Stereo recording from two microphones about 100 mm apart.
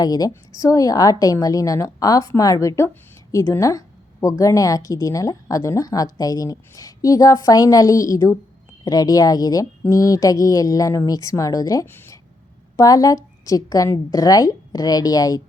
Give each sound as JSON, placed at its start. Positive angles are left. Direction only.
{"t": 0.0, "sound": "a woman's voice", "side_deg": 40}
{"t": 11.9, "sound": "a sound", "side_deg": 25}
{"t": 12.7, "sound": "a woman's voice", "side_deg": 35}